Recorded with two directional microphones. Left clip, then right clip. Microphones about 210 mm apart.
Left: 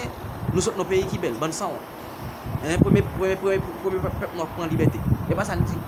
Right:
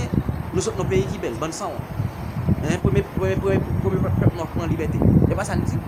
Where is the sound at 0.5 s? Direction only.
5° left (ahead or behind).